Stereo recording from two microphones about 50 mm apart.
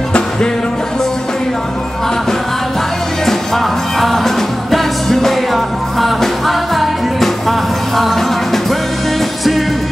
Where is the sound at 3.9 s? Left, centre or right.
Centre.